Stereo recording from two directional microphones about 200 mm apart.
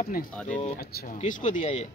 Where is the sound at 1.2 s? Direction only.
40° left (ahead or behind).